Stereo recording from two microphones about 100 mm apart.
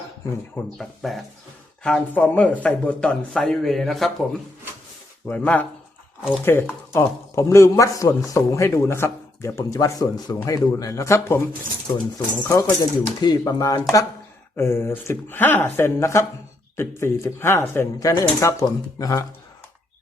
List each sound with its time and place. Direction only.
0.8 s speech: centre (ahead or behind)
5.3 s speech: 15° left (ahead or behind); by 13.8 s 35° left (ahead or behind)
14.5 s speech: 25° left (ahead or behind)